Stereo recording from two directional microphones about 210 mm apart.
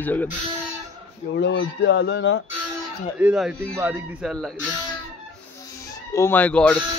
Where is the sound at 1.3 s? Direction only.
60° left (ahead or behind).